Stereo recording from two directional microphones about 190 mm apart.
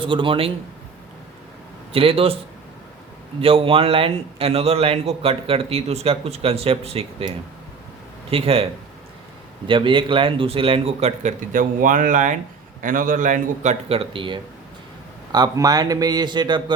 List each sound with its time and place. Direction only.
0.0 s speech: 25° right (ahead or behind)
1.9 s speech: 30° right (ahead or behind)
3.4 s a man's voice: 30° right (ahead or behind)
9.6 s a man's voice: 25° right (ahead or behind)